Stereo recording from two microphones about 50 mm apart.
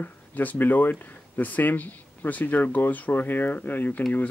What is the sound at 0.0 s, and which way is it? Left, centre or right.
Speech, left.